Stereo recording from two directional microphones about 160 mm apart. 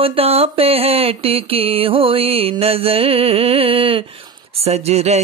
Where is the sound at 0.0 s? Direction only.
35° right (ahead or behind).